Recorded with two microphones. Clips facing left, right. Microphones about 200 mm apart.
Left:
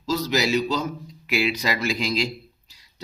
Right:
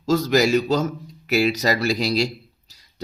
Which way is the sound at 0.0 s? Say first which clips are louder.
Right 5 dB; 50° right (ahead or behind).